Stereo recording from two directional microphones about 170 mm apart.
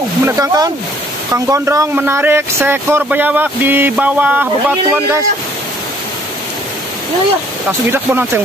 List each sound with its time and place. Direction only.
0.2 s speech: 20° right (ahead or behind)
7.9 s speech: 10° right (ahead or behind)